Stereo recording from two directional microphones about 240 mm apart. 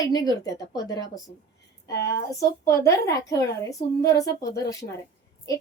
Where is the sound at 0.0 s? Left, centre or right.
Centre.